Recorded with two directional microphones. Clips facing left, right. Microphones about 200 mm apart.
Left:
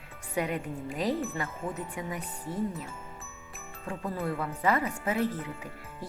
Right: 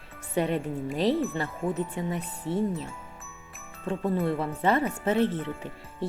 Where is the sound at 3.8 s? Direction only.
25° right (ahead or behind).